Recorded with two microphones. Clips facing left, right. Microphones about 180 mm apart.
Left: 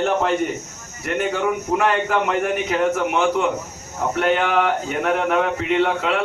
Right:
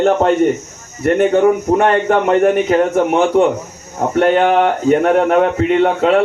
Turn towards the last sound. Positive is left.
turn(degrees=-40)  # may be behind; listen again after turning